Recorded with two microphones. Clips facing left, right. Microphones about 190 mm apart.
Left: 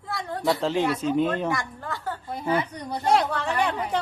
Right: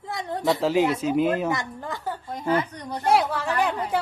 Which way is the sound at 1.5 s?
20° right (ahead or behind).